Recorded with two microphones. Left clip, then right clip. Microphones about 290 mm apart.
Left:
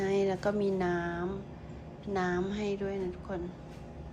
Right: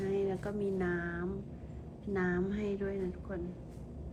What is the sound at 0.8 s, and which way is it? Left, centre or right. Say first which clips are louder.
A woman's voice: left 4 dB; centre.